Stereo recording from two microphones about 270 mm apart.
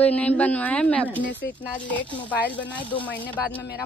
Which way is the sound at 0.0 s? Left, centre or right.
Centre.